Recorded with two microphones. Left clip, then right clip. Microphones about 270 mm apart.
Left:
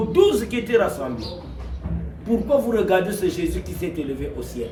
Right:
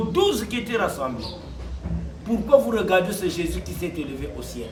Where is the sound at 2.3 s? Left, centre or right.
Centre.